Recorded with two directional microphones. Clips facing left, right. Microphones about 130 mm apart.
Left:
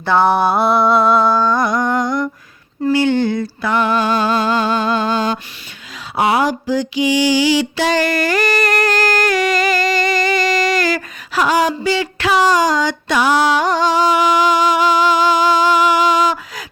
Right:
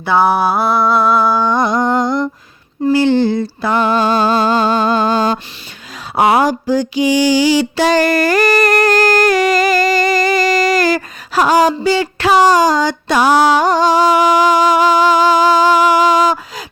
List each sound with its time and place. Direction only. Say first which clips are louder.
0.0 s mantra: right 1 dB; 10° right (ahead or behind)
1.4 s humming: right 2 dB; 20° right (ahead or behind)
2.8 s a sound: right 3 dB; 30° right (ahead or behind)